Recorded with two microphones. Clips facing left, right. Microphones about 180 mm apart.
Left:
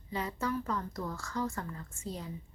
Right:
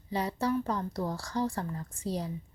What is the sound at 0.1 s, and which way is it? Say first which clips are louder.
A woman's voice: right 5 dB; 35° right (ahead or behind).